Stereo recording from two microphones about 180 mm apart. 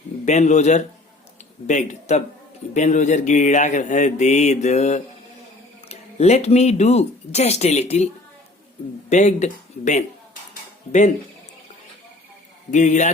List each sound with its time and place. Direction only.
0.3 s speech: 40° left (ahead or behind)
10.5 s a sound: 40° left (ahead or behind)
12.7 s a man's voice: 40° left (ahead or behind)